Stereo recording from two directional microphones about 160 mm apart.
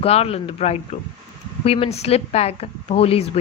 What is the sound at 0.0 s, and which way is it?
A woman's voice, 40° left (ahead or behind).